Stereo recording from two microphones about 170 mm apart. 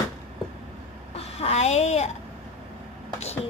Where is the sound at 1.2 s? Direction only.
40° left (ahead or behind).